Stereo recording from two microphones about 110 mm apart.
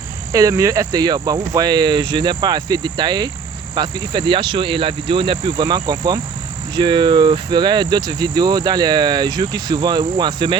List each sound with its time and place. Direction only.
0.3 s speech: 30° right (ahead or behind)
3.8 s cricket: 45° right (ahead or behind)
6.7 s speech: 45° right (ahead or behind)